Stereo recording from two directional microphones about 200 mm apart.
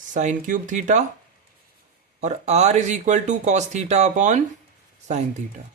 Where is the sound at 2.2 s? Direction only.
35° right (ahead or behind).